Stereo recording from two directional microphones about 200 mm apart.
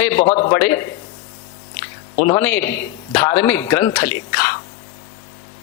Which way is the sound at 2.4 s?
10° left (ahead or behind).